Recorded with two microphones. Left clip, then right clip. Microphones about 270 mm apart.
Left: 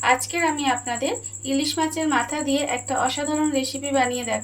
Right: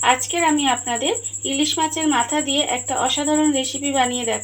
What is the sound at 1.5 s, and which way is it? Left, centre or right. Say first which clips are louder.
Speech: right 3 dB; right.